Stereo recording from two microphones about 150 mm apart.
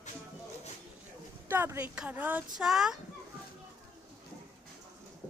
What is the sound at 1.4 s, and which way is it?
Speech, 15° right (ahead or behind).